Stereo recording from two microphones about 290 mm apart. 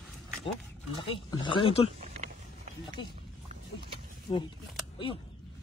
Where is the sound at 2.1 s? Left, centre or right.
Right.